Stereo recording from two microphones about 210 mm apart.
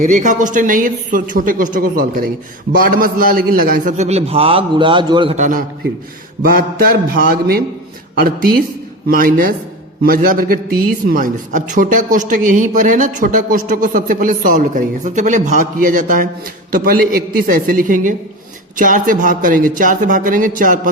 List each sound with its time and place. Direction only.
0.0 s a man's voice: 35° right (ahead or behind)
5.4 s a man's voice: 40° right (ahead or behind)
6.4 s mantra: 45° right (ahead or behind)
9.0 s mantra: 45° right (ahead or behind)
10.0 s a man's voice: 45° right (ahead or behind)